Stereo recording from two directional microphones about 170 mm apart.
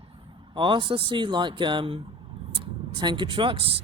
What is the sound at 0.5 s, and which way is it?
Speech, 30° right (ahead or behind).